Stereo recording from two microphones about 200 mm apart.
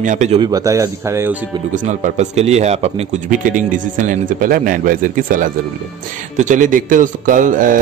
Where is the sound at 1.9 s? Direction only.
35° right (ahead or behind).